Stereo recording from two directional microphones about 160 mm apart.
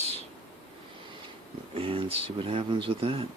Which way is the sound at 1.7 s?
35° right (ahead or behind).